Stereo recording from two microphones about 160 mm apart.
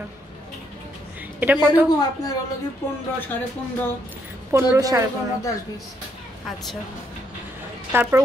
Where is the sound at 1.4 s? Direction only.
Centre (ahead or behind).